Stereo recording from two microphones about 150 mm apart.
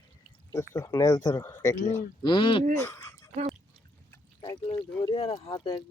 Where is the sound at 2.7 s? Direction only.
20° left (ahead or behind).